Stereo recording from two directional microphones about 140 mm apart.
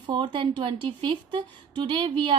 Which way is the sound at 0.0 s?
35° right (ahead or behind).